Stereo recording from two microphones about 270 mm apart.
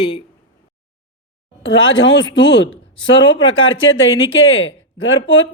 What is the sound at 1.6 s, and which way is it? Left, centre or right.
Speech, left.